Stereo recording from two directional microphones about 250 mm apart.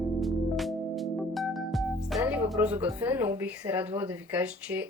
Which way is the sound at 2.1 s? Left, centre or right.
Centre.